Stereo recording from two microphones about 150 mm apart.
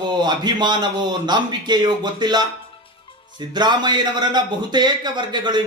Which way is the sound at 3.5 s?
30° right (ahead or behind).